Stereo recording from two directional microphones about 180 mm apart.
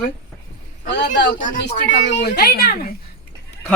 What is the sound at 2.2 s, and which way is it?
Speech, 60° left (ahead or behind).